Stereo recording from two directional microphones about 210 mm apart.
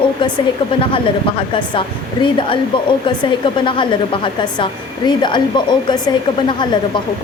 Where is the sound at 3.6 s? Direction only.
25° left (ahead or behind).